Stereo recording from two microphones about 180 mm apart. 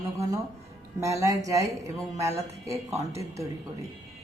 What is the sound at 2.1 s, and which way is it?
A woman's voice, 15° right (ahead or behind).